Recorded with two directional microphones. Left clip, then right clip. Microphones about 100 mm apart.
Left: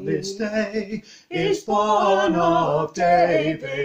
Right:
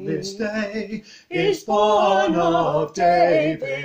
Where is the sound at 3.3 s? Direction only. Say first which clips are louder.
Right 2 dB; 35° right (ahead or behind).